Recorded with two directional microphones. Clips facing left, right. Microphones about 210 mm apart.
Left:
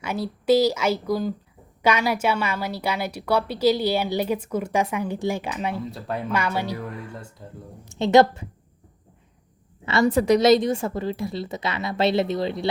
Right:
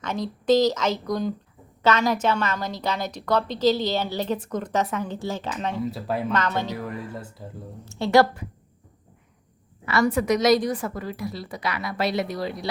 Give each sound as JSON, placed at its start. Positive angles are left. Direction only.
{"t": 0.0, "sound": "a woman's voice", "side_deg": 10}
{"t": 5.8, "sound": "speech", "side_deg": -5}
{"t": 6.3, "sound": "a woman's voice", "side_deg": 10}
{"t": 6.7, "sound": "speech", "side_deg": -5}
{"t": 7.9, "sound": "a woman's voice", "side_deg": 20}
{"t": 9.8, "sound": "a woman's voice", "side_deg": 25}